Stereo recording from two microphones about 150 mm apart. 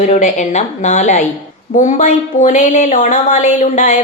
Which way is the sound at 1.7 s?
60° left (ahead or behind).